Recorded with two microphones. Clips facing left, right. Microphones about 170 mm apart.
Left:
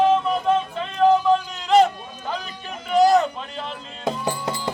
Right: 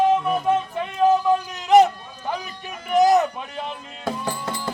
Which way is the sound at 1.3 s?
15° right (ahead or behind).